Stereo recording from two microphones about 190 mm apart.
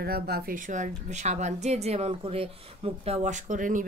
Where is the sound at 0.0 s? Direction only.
55° right (ahead or behind).